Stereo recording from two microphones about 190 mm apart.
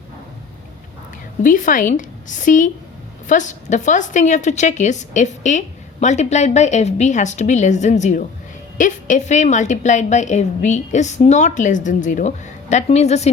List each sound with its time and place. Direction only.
1.4 s a woman's voice: 45° left (ahead or behind)